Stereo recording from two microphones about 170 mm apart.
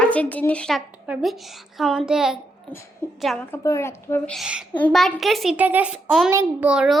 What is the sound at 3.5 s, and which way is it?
Speech, 15° left (ahead or behind).